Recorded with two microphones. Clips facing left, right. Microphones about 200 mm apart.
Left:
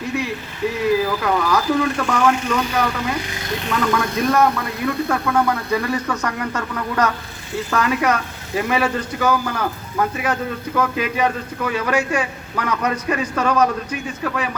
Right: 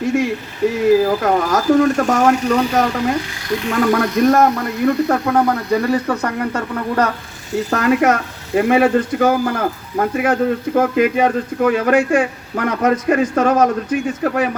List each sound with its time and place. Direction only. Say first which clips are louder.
0.9 s a man's voice: right 5 dB; 45° right (ahead or behind)
7.5 s speech: right 5 dB; 45° right (ahead or behind)